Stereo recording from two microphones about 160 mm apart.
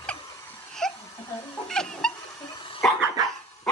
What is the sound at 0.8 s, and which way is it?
Crying, 5° left (ahead or behind).